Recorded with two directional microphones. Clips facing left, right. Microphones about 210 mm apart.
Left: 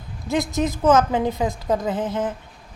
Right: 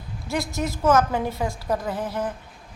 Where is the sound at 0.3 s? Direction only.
20° left (ahead or behind).